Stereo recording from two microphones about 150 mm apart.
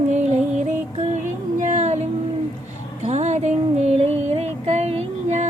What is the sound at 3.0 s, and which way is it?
Child singing, 50° right (ahead or behind).